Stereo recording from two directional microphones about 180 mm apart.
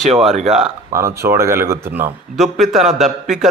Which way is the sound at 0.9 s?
15° right (ahead or behind).